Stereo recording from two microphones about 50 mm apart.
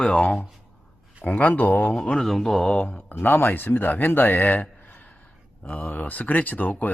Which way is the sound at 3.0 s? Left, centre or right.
Left.